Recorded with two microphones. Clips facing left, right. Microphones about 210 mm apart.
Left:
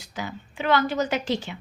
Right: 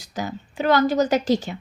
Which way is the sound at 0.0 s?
40° right (ahead or behind).